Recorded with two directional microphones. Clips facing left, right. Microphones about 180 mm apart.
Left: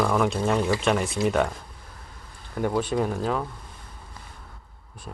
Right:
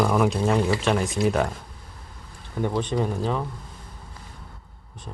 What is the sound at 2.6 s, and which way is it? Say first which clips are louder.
Speech: even; 5° left (ahead or behind).